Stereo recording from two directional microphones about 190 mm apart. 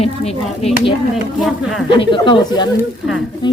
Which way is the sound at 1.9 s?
25° left (ahead or behind).